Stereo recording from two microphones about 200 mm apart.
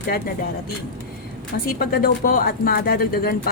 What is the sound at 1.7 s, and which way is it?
Speech, 50° left (ahead or behind).